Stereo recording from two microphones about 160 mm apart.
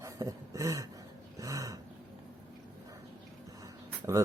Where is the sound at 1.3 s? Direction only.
20° right (ahead or behind).